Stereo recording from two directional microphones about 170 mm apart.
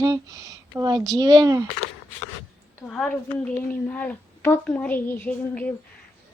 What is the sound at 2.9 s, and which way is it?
A woman's voice, 5° left (ahead or behind).